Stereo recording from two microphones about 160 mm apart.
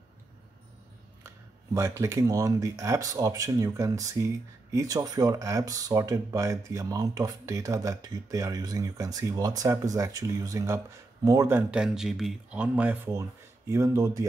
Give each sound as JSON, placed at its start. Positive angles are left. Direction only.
{"t": 1.7, "sound": "speech", "side_deg": -20}